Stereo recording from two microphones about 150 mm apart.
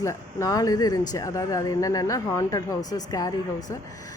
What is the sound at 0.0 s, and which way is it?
Speech, 20° left (ahead or behind).